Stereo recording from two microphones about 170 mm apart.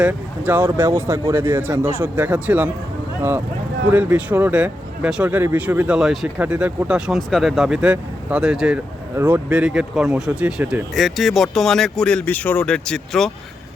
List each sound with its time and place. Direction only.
0.0 s speech: 10° right (ahead or behind)
3.9 s speech: 10° right (ahead or behind)